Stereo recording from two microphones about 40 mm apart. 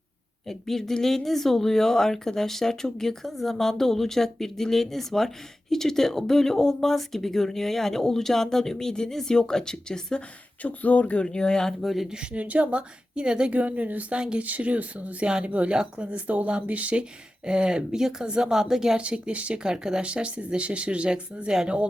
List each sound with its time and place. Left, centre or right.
0.4 s speech: centre
10.2 s speech: left; by 11.7 s centre
11.8 s speech: centre
12.1 s speech: right
13.5 s speech: right
14.1 s speech: right
14.4 s speech: right
15.7 s speech: right
16.0 s speech: right
17.0 s speech: right
18.9 s speech: right
19.6 s speech: centre
20.0 s speech: right